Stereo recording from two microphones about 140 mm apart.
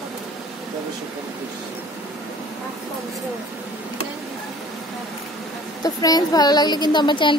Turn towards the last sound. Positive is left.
turn(degrees=35)  # may be behind; listen again after turning